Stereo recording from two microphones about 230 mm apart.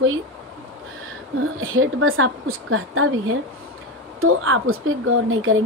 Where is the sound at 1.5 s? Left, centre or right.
Right.